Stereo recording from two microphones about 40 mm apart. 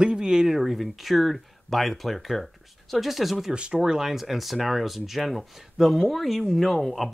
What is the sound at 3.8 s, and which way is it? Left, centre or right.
Speech, centre.